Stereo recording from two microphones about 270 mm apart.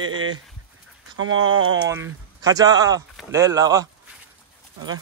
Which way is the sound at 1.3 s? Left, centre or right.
Centre.